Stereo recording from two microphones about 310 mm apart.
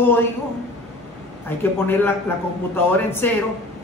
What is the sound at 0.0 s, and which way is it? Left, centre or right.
Speech, centre.